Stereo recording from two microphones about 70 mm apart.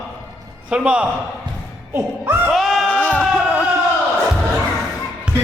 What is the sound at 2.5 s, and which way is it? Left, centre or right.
Sheep, centre.